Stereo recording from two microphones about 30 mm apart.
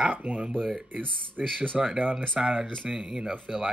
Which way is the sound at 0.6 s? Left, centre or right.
Left.